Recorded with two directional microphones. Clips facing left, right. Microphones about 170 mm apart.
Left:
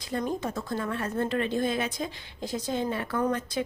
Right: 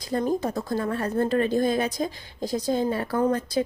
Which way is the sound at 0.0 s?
35° right (ahead or behind).